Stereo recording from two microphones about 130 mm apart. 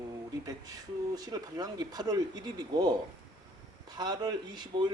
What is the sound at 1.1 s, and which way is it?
Speech, 30° right (ahead or behind).